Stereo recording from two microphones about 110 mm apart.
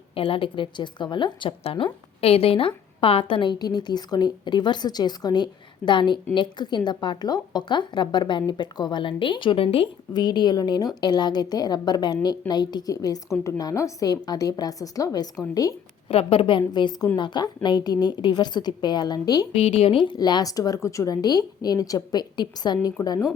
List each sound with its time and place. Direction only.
0.1 s a woman's voice: 55° left (ahead or behind)
10.1 s a woman's voice: 40° left (ahead or behind)
16.0 s a woman's voice: 60° left (ahead or behind); by 19.5 s 35° left (ahead or behind)
19.5 s a woman's voice: 65° left (ahead or behind); by 22.9 s 40° left (ahead or behind)